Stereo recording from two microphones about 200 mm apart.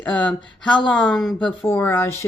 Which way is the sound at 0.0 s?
5° left (ahead or behind).